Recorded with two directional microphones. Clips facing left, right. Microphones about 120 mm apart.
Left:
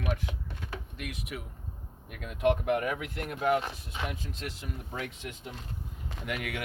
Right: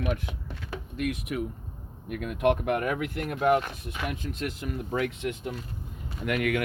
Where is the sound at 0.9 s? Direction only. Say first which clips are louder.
Right 13 dB; 50° right (ahead or behind).